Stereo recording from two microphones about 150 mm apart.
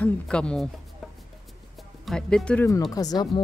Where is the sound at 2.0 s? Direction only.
Centre (ahead or behind).